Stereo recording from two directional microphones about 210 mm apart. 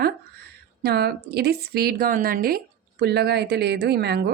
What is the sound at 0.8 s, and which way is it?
A woman's voice, 50° right (ahead or behind).